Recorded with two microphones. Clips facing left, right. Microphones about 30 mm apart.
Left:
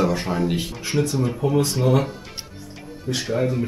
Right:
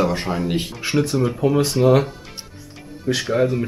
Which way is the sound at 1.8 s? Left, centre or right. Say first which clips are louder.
Right 5 dB; centre.